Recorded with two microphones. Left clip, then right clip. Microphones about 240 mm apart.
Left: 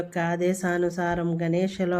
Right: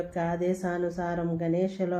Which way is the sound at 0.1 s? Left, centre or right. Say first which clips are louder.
Left 5 dB; left.